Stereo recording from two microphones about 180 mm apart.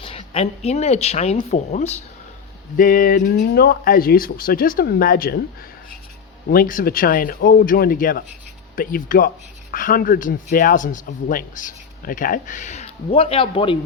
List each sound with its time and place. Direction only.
0.0 s speech: 30° left (ahead or behind)
2.7 s speech: 50° left (ahead or behind)
6.5 s speech: 50° left (ahead or behind); by 13.7 s 30° left (ahead or behind)